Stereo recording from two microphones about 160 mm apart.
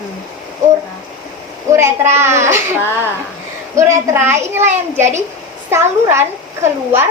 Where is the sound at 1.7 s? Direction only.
15° right (ahead or behind).